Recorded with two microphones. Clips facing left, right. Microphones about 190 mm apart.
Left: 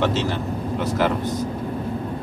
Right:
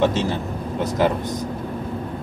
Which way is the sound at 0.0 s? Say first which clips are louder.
Right 2 dB; 15° right (ahead or behind).